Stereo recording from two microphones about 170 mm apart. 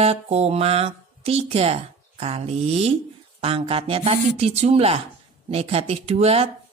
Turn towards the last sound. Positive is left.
turn(degrees=-35)  # may be behind; listen again after turning